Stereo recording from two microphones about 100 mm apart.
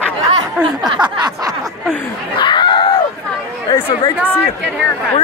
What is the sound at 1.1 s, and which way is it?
Speech, 45° right (ahead or behind).